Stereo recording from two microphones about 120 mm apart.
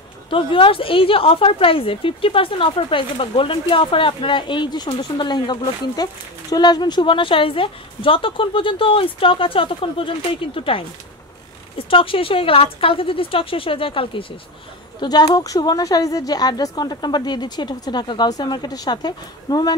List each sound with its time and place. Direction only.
0.3 s a woman's voice: 45° left (ahead or behind)
11.9 s a woman's voice: 50° left (ahead or behind)
15.0 s a woman's voice: 35° left (ahead or behind)